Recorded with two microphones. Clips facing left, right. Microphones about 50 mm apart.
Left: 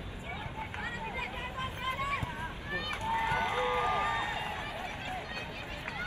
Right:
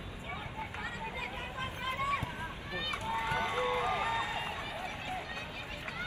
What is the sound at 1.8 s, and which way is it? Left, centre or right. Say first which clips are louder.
Run: right 1 dB; left.